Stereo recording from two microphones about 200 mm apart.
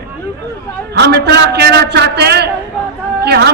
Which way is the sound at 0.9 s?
55° right (ahead or behind).